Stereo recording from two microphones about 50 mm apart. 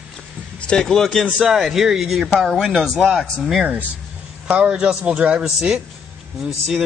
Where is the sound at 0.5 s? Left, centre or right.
Centre.